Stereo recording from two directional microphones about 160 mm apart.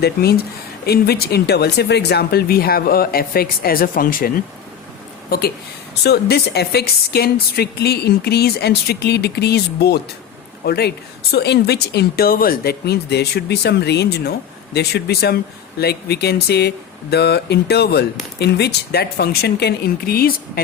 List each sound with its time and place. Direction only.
0.0 s speech: 80° left; by 4.3 s 60° left (ahead or behind)
6.0 s speech: 90° left; by 20.4 s 70° left (ahead or behind)